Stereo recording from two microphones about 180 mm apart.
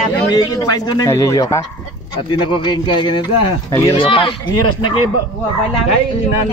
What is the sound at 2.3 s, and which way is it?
Speech, 25° left (ahead or behind).